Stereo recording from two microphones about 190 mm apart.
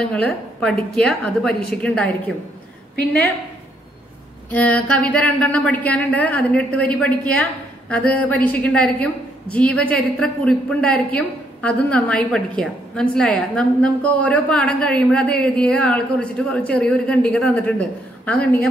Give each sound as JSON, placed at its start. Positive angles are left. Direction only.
{"t": 0.0, "sound": "a woman's voice", "side_deg": 5}
{"t": 4.5, "sound": "a woman's voice", "side_deg": 5}